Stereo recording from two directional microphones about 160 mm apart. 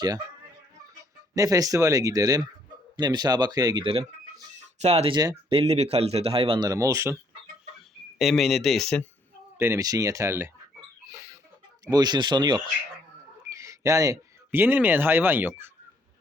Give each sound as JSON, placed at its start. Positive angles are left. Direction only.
{"t": 1.3, "sound": "speech", "side_deg": -20}
{"t": 5.1, "sound": "speech", "side_deg": -25}
{"t": 5.5, "sound": "speech", "side_deg": -40}
{"t": 6.7, "sound": "speech", "side_deg": -20}
{"t": 8.2, "sound": "speech", "side_deg": 0}
{"t": 9.6, "sound": "speech", "side_deg": -15}
{"t": 11.9, "sound": "speech", "side_deg": -25}